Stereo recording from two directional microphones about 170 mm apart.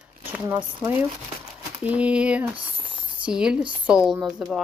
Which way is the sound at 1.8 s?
10° right (ahead or behind).